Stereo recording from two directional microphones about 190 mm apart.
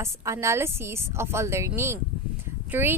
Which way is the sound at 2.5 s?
10° right (ahead or behind).